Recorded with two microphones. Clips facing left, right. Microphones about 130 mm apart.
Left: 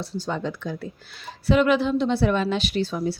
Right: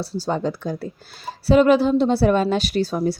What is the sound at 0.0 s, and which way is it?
A woman's voice, 35° right (ahead or behind).